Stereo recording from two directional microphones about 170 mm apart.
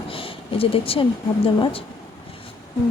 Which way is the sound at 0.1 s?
30° left (ahead or behind).